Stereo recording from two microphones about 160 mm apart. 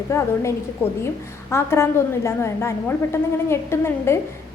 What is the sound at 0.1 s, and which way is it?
Speech, 15° left (ahead or behind).